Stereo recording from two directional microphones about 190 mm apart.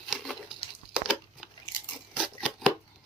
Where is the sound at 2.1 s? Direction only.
5° right (ahead or behind).